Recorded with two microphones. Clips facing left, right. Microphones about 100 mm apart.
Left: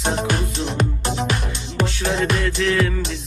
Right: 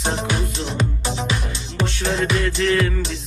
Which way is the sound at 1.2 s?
55° left (ahead or behind).